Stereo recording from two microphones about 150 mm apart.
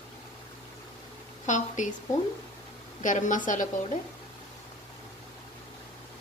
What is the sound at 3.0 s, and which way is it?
Speech, 55° left (ahead or behind).